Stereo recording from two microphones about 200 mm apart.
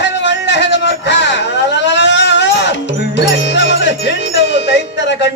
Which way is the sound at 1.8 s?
60° left (ahead or behind).